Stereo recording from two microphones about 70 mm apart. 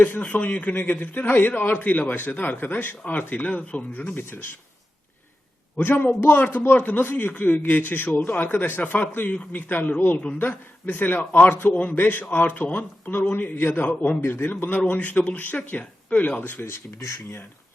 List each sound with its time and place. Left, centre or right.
0.0 s a man's voice: left
5.7 s a man's voice: left
16.6 s speech: left